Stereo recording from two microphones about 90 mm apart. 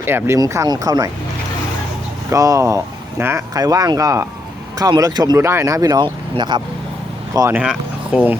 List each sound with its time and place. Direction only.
0.0 s speech: 25° right (ahead or behind)
0.3 s speech: 40° right (ahead or behind)
2.3 s speech: 35° right (ahead or behind)
3.5 s speech: 45° right (ahead or behind)
5.4 s speech: 30° right (ahead or behind)
6.0 s speech: 55° right (ahead or behind)
7.5 s speech: 15° right (ahead or behind)